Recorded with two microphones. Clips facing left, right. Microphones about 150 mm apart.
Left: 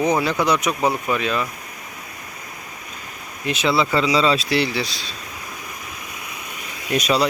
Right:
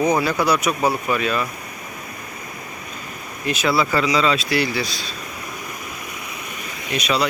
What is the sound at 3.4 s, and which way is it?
Speech, 25° left (ahead or behind).